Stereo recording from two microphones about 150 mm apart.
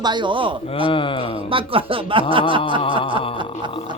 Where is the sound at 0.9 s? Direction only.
35° left (ahead or behind).